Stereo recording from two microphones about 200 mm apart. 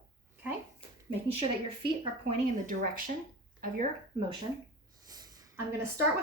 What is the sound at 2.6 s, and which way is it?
Speech, 45° right (ahead or behind).